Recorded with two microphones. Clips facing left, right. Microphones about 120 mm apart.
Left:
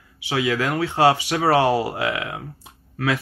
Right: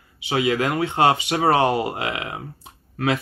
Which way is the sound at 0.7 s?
20° right (ahead or behind).